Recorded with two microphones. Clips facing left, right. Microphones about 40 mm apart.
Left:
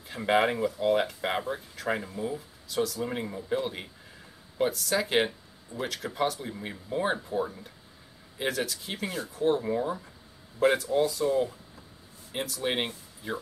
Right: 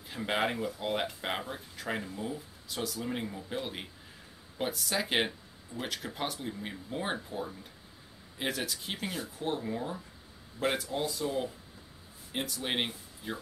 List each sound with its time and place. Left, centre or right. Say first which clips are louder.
0.2 s speech: left 6 dB; centre
5.7 s speech: left 5 dB; centre
6.1 s speech: left 11 dB; centre
6.4 s speech: left 1 dB; centre
8.4 s speech: left 4 dB; centre
9.6 s speech: left 7 dB; centre
10.6 s speech: left 8 dB; centre